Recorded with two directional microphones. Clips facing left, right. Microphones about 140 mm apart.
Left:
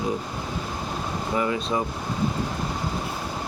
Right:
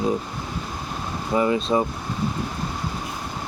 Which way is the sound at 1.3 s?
25° right (ahead or behind).